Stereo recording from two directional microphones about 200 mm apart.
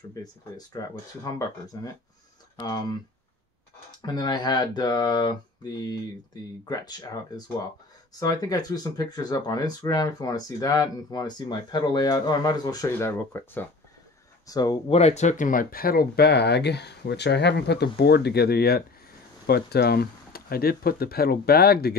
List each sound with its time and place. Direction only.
0.1 s speech: 20° left (ahead or behind)
4.0 s speech: 20° left (ahead or behind)
15.0 s speech: 35° left (ahead or behind); by 21.9 s 50° left (ahead or behind)